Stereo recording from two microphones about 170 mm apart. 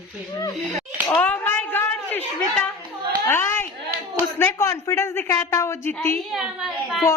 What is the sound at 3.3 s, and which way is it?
A woman's voice, 15° left (ahead or behind).